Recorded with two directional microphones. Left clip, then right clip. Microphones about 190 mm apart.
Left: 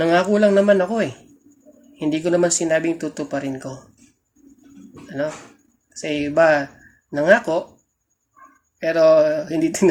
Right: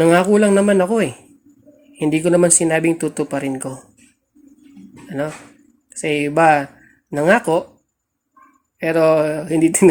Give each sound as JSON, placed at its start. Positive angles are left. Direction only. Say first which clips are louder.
{"t": 0.0, "sound": "speech", "louder": "right 3 dB", "side_deg": -40}
{"t": 5.0, "sound": "a sound", "louder": "right 1 dB", "side_deg": -40}
{"t": 6.0, "sound": "speech", "louder": "right 2 dB", "side_deg": -45}
{"t": 8.8, "sound": "speech", "louder": "left 1 dB", "side_deg": -40}